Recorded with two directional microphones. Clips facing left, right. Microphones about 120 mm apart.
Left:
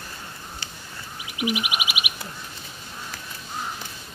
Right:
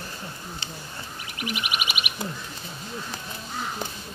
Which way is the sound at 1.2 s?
5° left (ahead or behind).